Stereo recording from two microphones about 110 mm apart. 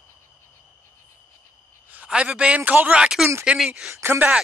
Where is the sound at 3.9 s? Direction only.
20° right (ahead or behind).